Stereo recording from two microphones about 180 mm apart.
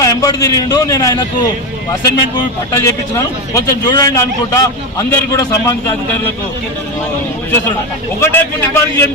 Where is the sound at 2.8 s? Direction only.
20° left (ahead or behind).